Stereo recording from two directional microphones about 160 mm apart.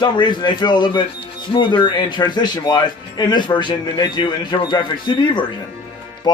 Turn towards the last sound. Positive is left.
turn(degrees=30)  # may be behind; listen again after turning